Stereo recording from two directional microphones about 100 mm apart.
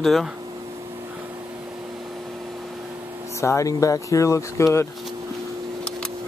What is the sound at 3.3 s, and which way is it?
Speech, 30° left (ahead or behind).